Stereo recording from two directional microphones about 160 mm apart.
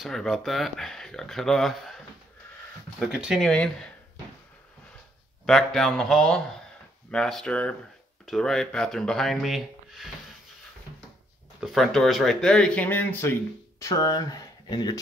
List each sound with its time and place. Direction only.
0.0 s speech: centre (ahead or behind)
3.0 s speech: 5° right (ahead or behind)
5.5 s speech: 5° left (ahead or behind)
11.6 s speech: centre (ahead or behind); by 15.0 s 25° left (ahead or behind)